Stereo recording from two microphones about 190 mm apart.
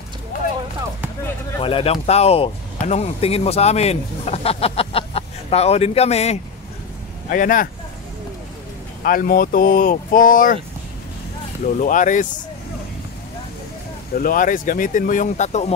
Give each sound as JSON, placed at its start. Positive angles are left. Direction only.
{"t": 1.6, "sound": "speech", "side_deg": 30}
{"t": 7.2, "sound": "speech", "side_deg": 45}
{"t": 9.0, "sound": "speech", "side_deg": 50}
{"t": 11.6, "sound": "speech", "side_deg": 45}
{"t": 14.1, "sound": "speech", "side_deg": 45}